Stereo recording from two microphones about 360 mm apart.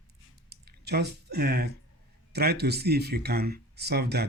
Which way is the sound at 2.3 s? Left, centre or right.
Right.